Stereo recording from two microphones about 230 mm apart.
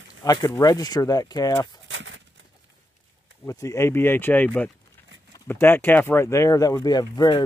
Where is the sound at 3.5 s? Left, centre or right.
Centre.